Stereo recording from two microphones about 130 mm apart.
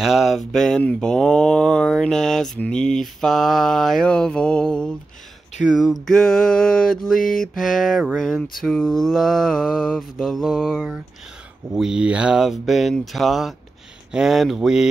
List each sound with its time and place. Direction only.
0.0 s mantra: centre (ahead or behind)
7.2 s music: 90° left
7.5 s mantra: centre (ahead or behind)